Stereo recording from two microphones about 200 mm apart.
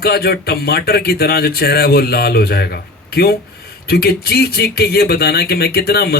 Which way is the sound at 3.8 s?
50° left (ahead or behind).